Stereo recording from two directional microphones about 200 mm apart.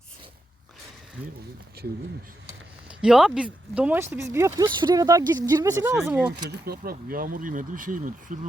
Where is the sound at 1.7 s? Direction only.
50° right (ahead or behind).